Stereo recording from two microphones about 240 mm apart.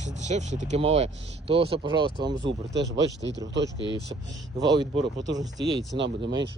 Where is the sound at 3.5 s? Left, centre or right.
Right.